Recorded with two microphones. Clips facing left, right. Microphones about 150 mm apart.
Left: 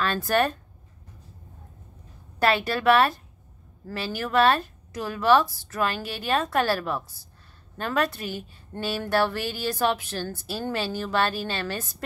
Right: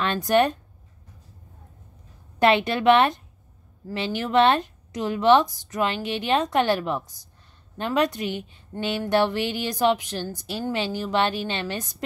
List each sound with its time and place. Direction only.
0.0 s speech: 20° right (ahead or behind)
2.3 s speech: 20° right (ahead or behind)